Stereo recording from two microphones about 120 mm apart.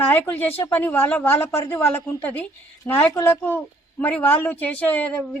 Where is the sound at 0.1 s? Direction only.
15° left (ahead or behind).